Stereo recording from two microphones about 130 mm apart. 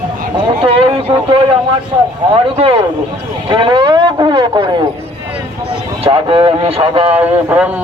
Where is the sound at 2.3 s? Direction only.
45° right (ahead or behind).